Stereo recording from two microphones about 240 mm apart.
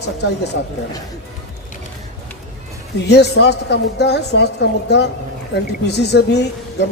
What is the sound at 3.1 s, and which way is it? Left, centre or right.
A woman's voice, left.